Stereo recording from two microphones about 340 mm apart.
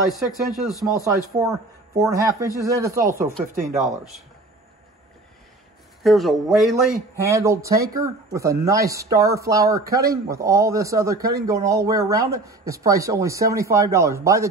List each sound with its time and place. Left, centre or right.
0.3 s speech: centre
0.7 s speech: centre
1.3 s a man's voice: centre
3.5 s speech: right
6.0 s a man's voice: centre